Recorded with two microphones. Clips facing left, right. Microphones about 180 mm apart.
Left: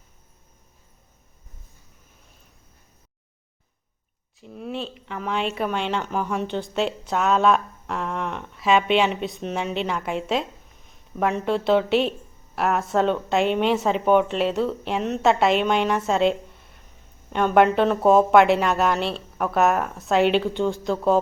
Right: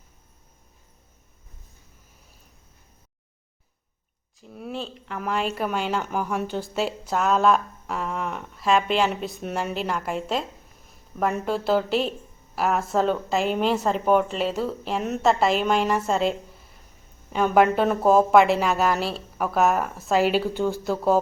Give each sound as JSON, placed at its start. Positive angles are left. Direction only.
{"t": 4.4, "sound": "speech", "side_deg": 0}